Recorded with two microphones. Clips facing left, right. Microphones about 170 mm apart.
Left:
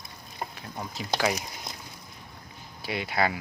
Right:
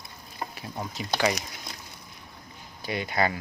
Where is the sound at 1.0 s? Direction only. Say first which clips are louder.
Right 1 dB; centre (ahead or behind).